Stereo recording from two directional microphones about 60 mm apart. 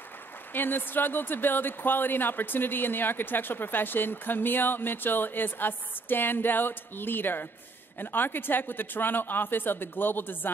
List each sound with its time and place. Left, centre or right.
0.5 s speech: left